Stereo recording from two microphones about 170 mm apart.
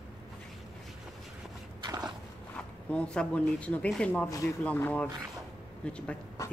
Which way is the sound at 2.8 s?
5° left (ahead or behind).